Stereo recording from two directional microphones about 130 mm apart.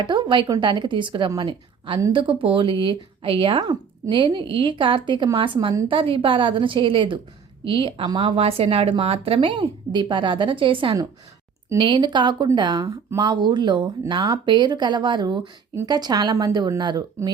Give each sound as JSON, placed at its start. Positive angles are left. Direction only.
{"t": 0.0, "sound": "speech", "side_deg": -35}